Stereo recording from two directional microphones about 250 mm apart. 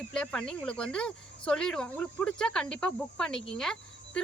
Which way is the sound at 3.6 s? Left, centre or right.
Centre.